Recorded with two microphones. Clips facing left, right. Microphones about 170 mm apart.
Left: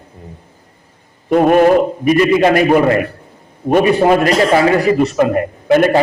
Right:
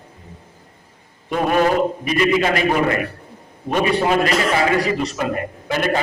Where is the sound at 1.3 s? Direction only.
45° left (ahead or behind).